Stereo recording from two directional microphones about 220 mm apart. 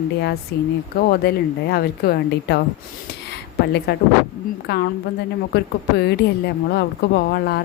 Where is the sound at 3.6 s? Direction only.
50° left (ahead or behind).